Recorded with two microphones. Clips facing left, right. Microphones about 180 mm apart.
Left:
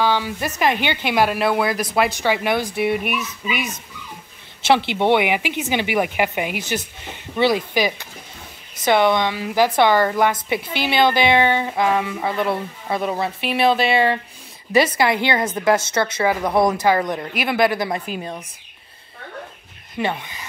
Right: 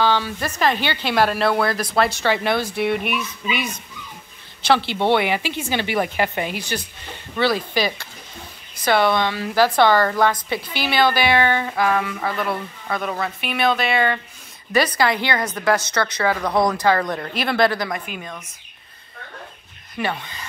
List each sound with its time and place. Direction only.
0.0 s speech: 15° left (ahead or behind)
4.6 s a woman's voice: 20° left (ahead or behind)
17.8 s speech: 30° left (ahead or behind)
20.0 s speech: 20° left (ahead or behind)